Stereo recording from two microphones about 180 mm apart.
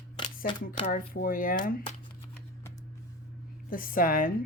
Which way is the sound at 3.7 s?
50° left (ahead or behind).